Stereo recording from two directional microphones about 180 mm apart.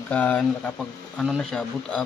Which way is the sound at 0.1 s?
10° left (ahead or behind).